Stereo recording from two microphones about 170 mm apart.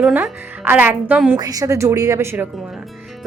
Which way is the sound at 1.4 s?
20° right (ahead or behind).